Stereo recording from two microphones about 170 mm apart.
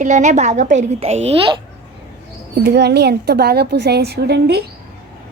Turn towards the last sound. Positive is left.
turn(degrees=-75)  # may be behind; listen again after turning